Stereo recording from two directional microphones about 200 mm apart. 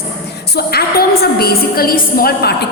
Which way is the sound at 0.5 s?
50° left (ahead or behind).